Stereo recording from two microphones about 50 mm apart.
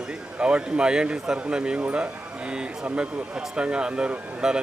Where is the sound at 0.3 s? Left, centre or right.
Right.